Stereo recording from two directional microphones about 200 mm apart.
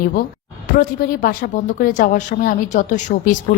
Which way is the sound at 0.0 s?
45° left (ahead or behind).